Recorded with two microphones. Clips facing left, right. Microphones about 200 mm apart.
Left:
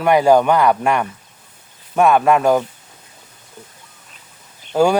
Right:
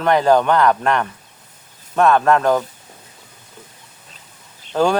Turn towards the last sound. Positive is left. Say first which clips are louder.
# left 2 dB
turn(degrees=10)  # may be behind; listen again after turning